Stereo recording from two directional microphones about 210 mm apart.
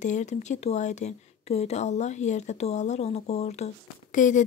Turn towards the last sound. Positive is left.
turn(degrees=35)  # may be behind; listen again after turning